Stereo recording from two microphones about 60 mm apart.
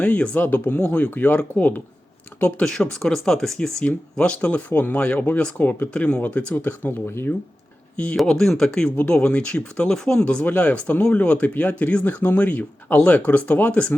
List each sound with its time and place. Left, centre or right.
0.0 s speech: left
2.6 s speech: centre
4.2 s speech: left
5.9 s speech: centre
7.1 s speech: left
8.1 s speech: centre
10.4 s speech: left